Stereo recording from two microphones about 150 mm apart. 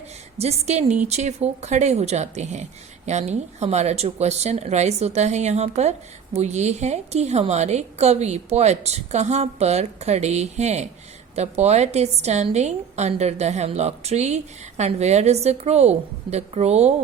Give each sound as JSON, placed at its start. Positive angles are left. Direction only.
{"t": 0.3, "sound": "a woman's voice", "side_deg": -45}